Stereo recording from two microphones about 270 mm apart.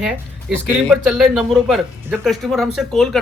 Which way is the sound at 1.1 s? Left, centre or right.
Centre.